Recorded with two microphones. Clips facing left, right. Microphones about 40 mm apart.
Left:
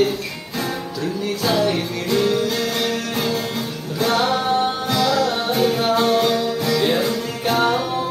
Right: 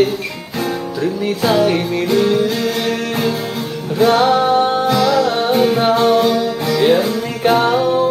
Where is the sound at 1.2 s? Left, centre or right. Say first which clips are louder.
Right 5 dB; centre.